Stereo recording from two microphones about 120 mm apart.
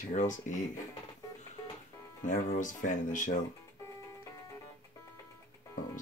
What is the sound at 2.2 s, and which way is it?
Speech, 90° left.